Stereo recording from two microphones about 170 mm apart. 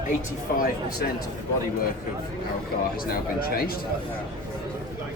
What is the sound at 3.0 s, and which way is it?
Speech, 60° left (ahead or behind).